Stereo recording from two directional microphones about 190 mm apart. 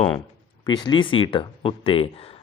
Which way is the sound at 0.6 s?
20° left (ahead or behind).